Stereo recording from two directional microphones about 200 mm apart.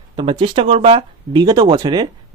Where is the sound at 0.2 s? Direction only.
25° right (ahead or behind).